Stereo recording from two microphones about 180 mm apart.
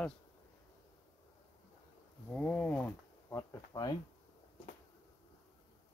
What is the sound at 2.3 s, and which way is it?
Speech, 5° left (ahead or behind).